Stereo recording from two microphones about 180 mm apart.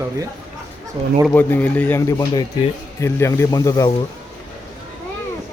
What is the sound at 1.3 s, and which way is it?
Speech, 10° left (ahead or behind).